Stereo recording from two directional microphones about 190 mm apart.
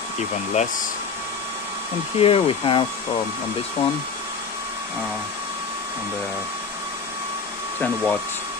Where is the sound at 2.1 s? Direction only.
30° left (ahead or behind).